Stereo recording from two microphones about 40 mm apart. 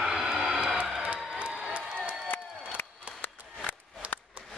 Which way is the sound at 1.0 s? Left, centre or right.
Right.